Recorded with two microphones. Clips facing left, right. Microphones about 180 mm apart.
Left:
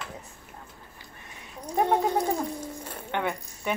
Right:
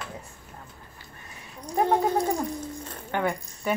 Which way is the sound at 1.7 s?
10° left (ahead or behind).